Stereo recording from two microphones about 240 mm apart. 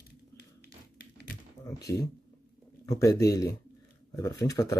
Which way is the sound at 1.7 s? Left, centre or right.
Centre.